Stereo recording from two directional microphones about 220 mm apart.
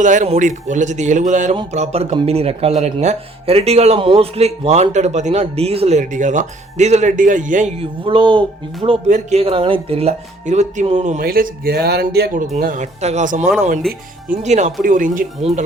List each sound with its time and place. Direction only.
0.0 s speech: 35° right (ahead or behind)